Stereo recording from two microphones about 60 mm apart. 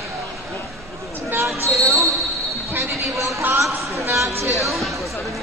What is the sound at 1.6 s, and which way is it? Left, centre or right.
Basketball bounce, right.